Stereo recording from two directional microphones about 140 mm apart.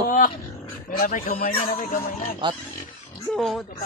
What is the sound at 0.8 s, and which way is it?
A man's voice, 90° left.